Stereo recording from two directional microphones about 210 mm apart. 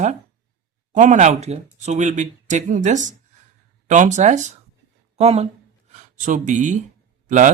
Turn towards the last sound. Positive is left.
turn(degrees=-35)  # may be behind; listen again after turning